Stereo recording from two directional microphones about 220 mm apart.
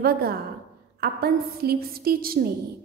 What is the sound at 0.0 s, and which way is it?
A woman's voice, 45° right (ahead or behind).